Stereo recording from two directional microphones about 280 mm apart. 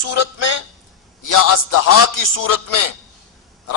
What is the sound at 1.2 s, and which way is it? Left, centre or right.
A man's voice, left.